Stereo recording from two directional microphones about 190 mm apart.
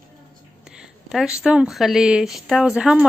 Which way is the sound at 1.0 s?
Centre (ahead or behind).